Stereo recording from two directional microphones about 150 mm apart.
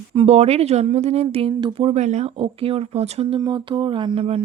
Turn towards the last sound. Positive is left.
turn(degrees=-40)  # may be behind; listen again after turning